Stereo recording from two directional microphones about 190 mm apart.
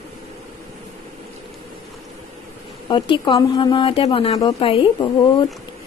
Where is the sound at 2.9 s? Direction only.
25° left (ahead or behind).